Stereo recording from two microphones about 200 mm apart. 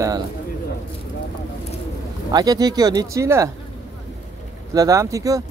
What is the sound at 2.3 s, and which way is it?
Speech, 20° right (ahead or behind).